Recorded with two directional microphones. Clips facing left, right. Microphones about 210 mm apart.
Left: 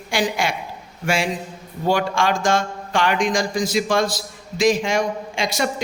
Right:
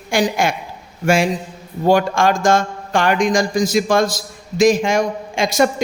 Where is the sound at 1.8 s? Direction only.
45° right (ahead or behind).